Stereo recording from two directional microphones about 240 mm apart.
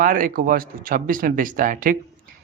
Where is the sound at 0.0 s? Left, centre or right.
Right.